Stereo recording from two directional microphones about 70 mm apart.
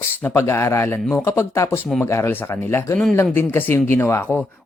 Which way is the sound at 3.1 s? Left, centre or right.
Left.